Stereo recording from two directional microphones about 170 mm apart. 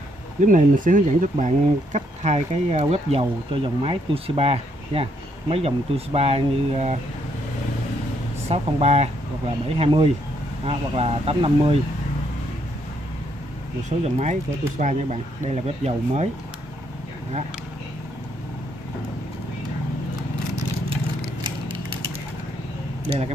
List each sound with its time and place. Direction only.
0.4 s speech: 50° right (ahead or behind)
8.5 s speech: 35° right (ahead or behind)
13.8 s speech: 40° right (ahead or behind)
23.0 s speech: 35° right (ahead or behind)